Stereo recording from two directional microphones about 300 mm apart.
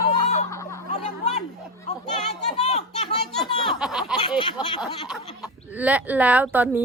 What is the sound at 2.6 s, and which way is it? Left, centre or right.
Speech, left.